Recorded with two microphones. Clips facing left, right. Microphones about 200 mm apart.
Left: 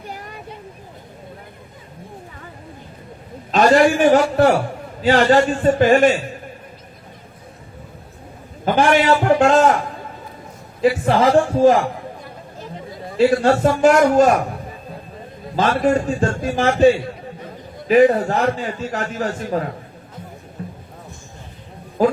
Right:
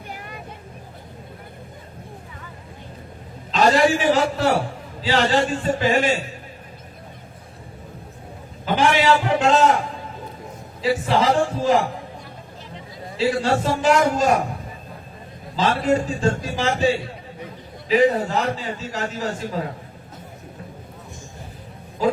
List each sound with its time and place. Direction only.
3.5 s a man's voice: 55° left (ahead or behind)
8.6 s a sound: 50° left (ahead or behind)
10.8 s a man's voice: 55° left (ahead or behind)
12.2 s a sound: 50° left (ahead or behind)
14.1 s a man's voice: 55° left (ahead or behind)
15.5 s a man's voice: 55° left (ahead or behind)
22.0 s speech: 55° left (ahead or behind)